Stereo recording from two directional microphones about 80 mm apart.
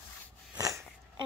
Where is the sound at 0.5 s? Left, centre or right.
Right.